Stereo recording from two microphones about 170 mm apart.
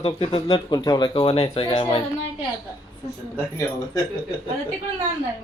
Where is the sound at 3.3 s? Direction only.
20° left (ahead or behind).